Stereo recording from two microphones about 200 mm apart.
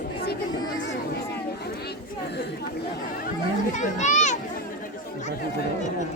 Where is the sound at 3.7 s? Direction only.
40° left (ahead or behind).